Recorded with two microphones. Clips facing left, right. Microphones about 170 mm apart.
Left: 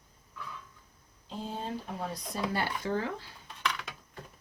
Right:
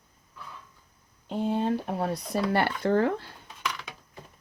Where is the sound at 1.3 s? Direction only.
65° right (ahead or behind).